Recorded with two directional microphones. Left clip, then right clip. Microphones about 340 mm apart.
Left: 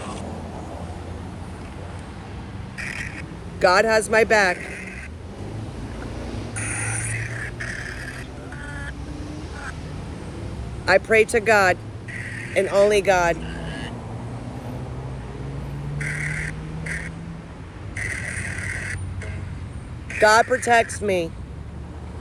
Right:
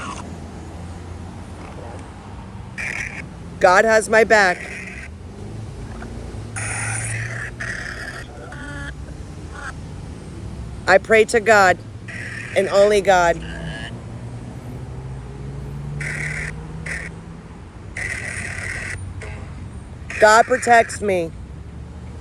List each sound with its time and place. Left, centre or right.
2.7 s quack: centre
6.6 s vehicle: right
10.8 s speech: right
16.0 s a sound: right
20.1 s speech: right